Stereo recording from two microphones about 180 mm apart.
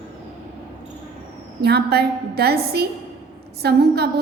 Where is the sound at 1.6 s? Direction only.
65° right (ahead or behind).